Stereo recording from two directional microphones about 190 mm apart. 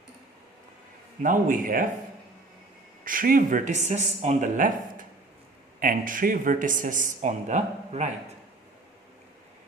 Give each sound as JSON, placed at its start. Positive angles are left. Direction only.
{"t": 1.2, "sound": "speech", "side_deg": -45}
{"t": 3.0, "sound": "speech", "side_deg": -45}